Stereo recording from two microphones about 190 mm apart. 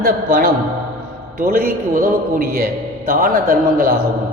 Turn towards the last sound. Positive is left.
turn(degrees=-50)  # may be behind; listen again after turning